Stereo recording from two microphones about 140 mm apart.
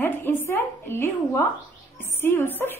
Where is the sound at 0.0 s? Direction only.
15° left (ahead or behind).